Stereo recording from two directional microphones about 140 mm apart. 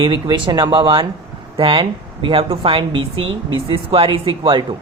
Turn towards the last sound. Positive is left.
turn(degrees=-35)  # may be behind; listen again after turning